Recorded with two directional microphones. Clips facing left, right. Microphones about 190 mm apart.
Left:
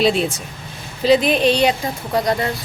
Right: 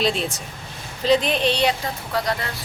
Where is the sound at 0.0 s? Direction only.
5° left (ahead or behind).